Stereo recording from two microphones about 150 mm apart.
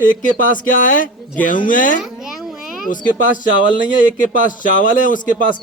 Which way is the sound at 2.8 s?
65° left (ahead or behind).